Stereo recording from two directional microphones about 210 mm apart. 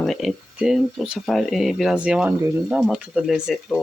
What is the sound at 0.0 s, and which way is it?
Speech, centre (ahead or behind).